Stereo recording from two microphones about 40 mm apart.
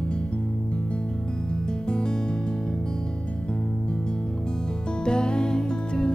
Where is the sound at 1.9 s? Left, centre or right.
Left.